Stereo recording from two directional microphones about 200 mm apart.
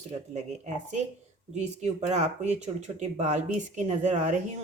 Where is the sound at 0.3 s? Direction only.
35° right (ahead or behind).